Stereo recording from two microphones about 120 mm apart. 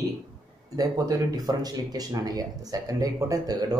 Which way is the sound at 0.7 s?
30° right (ahead or behind).